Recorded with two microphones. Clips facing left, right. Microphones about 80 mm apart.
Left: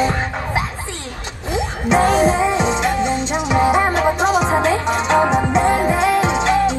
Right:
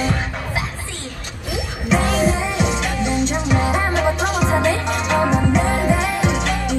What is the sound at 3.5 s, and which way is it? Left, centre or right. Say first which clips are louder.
Music: left 7 dB; centre.